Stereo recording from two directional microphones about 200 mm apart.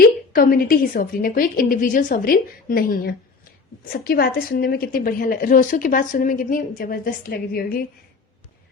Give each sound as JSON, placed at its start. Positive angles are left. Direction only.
{"t": 0.3, "sound": "a woman's voice", "side_deg": 45}